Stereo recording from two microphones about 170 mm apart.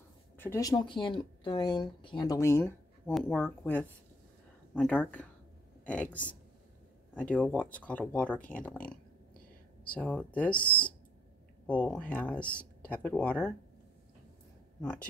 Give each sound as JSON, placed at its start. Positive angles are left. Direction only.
{"t": 0.4, "sound": "speech", "side_deg": 15}
{"t": 3.2, "sound": "speech", "side_deg": 5}
{"t": 9.8, "sound": "speech", "side_deg": 10}
{"t": 11.6, "sound": "speech", "side_deg": 10}
{"t": 14.8, "sound": "speech", "side_deg": 5}